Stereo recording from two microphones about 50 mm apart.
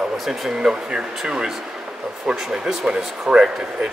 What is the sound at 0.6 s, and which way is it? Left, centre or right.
Speech, centre.